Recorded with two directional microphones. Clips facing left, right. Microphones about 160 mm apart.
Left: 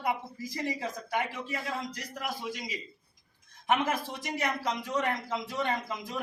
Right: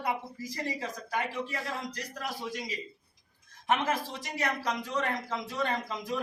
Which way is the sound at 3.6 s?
15° left (ahead or behind).